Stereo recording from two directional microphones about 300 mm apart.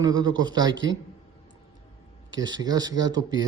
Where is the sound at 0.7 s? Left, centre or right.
Right.